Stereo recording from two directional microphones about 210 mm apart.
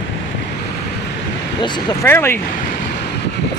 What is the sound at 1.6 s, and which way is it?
Speech, 20° left (ahead or behind).